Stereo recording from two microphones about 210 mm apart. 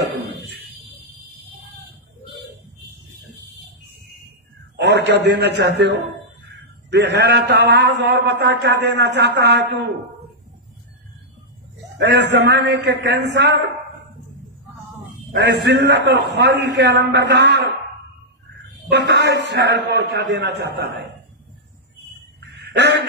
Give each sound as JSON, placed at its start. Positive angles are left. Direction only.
{"t": 0.0, "sound": "a sound", "side_deg": -55}
{"t": 4.7, "sound": "a man's voice", "side_deg": -55}
{"t": 12.0, "sound": "a man's voice", "side_deg": -55}
{"t": 15.3, "sound": "a man's voice", "side_deg": -55}
{"t": 18.9, "sound": "a man's voice", "side_deg": -55}
{"t": 22.5, "sound": "a sound", "side_deg": -50}